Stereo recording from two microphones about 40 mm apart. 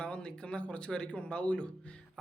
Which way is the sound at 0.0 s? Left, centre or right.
Left.